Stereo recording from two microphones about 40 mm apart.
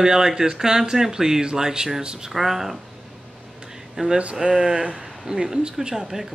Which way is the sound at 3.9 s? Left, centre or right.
Centre.